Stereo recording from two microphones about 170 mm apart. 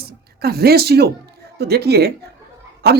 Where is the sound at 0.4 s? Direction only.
65° right (ahead or behind).